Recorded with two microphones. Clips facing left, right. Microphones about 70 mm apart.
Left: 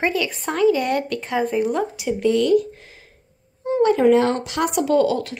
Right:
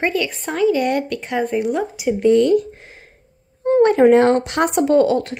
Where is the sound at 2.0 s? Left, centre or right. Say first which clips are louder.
Right 7 dB; right.